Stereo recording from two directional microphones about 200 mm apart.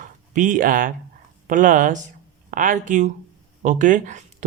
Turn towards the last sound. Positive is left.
turn(degrees=-40)  # may be behind; listen again after turning